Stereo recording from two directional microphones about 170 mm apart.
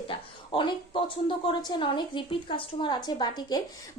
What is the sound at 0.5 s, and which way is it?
A woman's voice, 30° left (ahead or behind).